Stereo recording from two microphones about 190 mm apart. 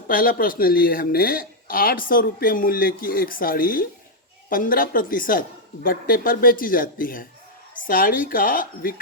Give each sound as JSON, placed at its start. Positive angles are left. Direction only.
{"t": 0.1, "sound": "speech", "side_deg": 50}